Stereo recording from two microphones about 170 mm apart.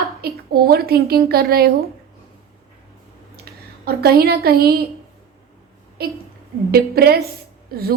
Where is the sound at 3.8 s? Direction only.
65° right (ahead or behind).